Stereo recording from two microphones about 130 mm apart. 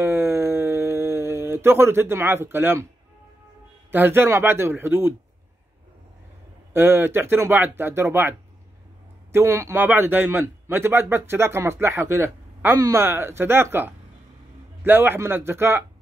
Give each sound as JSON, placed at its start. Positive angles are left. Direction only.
{"t": 0.0, "sound": "a sound", "side_deg": -20}
{"t": 3.9, "sound": "speech", "side_deg": -15}
{"t": 6.7, "sound": "a man's voice", "side_deg": -15}